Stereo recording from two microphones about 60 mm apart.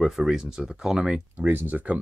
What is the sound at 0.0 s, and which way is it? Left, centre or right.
Speech, centre.